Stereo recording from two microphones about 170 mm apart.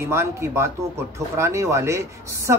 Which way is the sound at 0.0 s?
15° right (ahead or behind).